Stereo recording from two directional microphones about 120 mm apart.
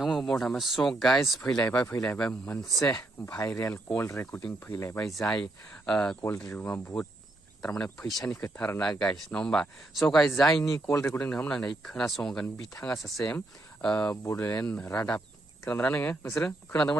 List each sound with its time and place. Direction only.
0.0 s speech: centre (ahead or behind)
2.9 s speech: 25° left (ahead or behind)
3.5 s speech: 15° left (ahead or behind)
4.9 s speech: 5° left (ahead or behind)
6.2 s speech: 20° left (ahead or behind)
8.0 s speech: centre (ahead or behind)
8.4 s speech: 20° left (ahead or behind); by 10.6 s 5° left (ahead or behind)
10.6 s speech: 25° left (ahead or behind)
14.3 s speech: 25° left (ahead or behind)